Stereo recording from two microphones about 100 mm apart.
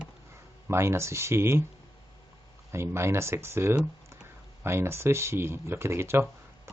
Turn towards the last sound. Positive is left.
turn(degrees=-25)  # may be behind; listen again after turning